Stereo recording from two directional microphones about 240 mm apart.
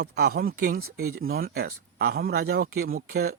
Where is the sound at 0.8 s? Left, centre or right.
Right.